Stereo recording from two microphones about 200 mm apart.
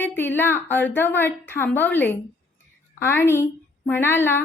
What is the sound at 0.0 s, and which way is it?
A woman's voice, 10° left (ahead or behind).